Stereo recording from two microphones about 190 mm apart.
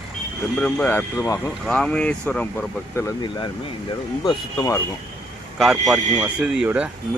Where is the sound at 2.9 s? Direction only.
20° left (ahead or behind).